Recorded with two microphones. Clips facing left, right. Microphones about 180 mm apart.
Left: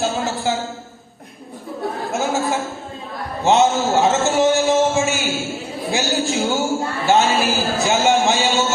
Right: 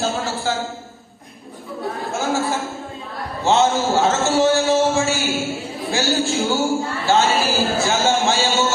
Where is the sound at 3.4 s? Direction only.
20° left (ahead or behind).